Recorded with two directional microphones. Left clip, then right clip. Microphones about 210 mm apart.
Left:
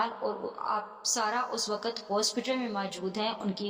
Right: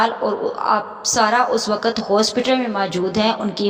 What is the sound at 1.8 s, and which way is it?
Speech, 35° right (ahead or behind).